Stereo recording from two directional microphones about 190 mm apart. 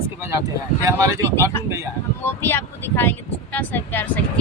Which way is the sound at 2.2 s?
10° left (ahead or behind).